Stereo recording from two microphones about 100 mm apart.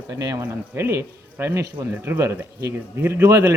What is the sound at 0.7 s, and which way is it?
Speech, 25° right (ahead or behind).